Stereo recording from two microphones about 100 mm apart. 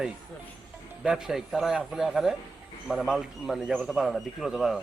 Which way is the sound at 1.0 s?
5° right (ahead or behind).